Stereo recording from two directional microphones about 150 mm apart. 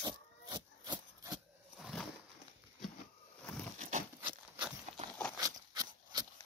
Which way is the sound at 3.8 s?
60° right (ahead or behind).